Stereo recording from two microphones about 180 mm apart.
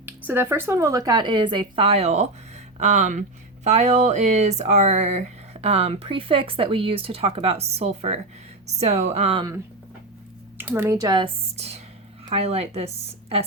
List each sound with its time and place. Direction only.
0.3 s speech: 10° right (ahead or behind); by 9.6 s 25° right (ahead or behind)
10.6 s speech: 10° right (ahead or behind); by 13.4 s 35° right (ahead or behind)